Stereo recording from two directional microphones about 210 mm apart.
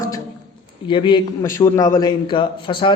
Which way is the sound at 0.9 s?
25° left (ahead or behind).